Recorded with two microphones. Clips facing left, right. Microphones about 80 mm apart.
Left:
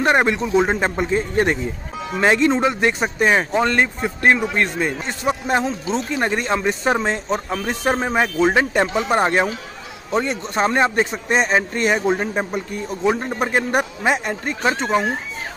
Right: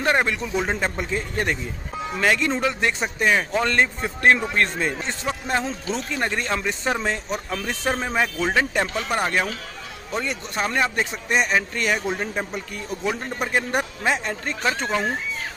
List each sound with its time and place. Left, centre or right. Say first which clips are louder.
0.0 s speech: left 5 dB; left